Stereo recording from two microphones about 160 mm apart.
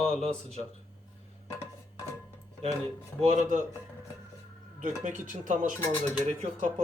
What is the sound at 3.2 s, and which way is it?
Speech, 45° right (ahead or behind).